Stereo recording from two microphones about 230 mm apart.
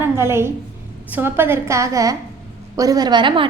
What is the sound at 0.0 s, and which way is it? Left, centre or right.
A woman's voice, centre.